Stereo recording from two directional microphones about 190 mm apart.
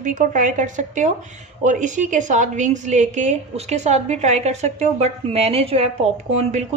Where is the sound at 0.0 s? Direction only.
40° right (ahead or behind).